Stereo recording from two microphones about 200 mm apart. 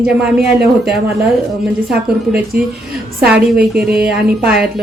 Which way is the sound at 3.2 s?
5° right (ahead or behind).